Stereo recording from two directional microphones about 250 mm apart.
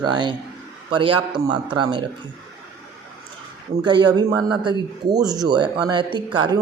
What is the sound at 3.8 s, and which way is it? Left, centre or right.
Speech, centre.